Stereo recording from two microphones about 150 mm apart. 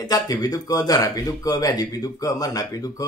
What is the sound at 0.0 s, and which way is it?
Speech, 25° left (ahead or behind).